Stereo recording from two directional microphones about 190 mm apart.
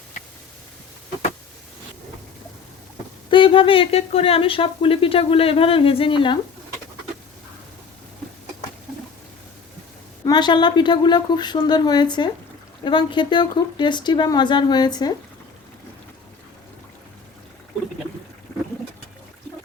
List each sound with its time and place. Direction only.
3.2 s speech: 25° left (ahead or behind)
10.2 s speech: 20° left (ahead or behind)